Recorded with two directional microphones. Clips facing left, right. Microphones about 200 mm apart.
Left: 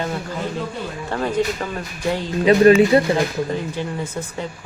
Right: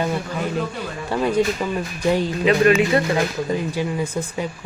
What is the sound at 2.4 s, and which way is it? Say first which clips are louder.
Speech: left 5 dB; 35° left (ahead or behind).